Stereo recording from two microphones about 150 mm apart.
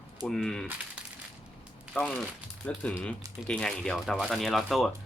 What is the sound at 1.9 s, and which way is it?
Speech, centre (ahead or behind).